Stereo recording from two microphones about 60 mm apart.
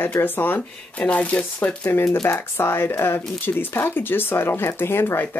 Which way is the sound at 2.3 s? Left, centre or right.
Left.